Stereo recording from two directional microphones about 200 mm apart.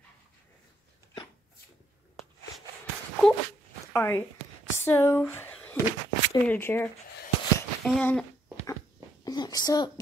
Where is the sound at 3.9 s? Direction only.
15° left (ahead or behind).